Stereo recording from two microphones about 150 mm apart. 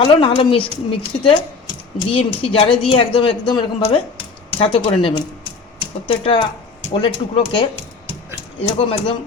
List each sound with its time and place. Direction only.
0.0 s speech: 35° left (ahead or behind)
8.8 s speech: 35° left (ahead or behind)